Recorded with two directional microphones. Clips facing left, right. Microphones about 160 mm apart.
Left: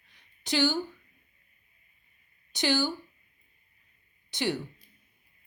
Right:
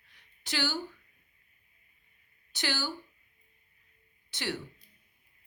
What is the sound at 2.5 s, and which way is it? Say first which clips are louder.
Speech: left 8 dB; 15° left (ahead or behind).